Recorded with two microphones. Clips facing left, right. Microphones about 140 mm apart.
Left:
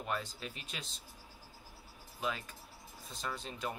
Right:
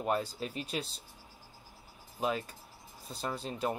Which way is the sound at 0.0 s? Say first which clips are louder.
Right 7 dB; 35° right (ahead or behind).